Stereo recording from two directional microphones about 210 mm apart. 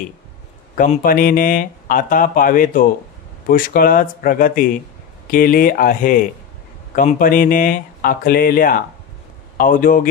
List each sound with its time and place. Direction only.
0.8 s speech: 40° left (ahead or behind)